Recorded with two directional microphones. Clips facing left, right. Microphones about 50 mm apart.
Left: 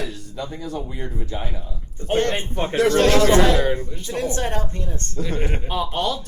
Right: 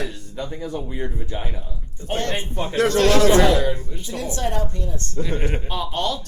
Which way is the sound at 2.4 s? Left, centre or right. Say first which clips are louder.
Left 1 dB; left.